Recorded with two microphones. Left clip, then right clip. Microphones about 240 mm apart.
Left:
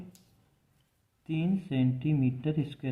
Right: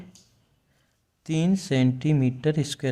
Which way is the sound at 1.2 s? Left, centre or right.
Right.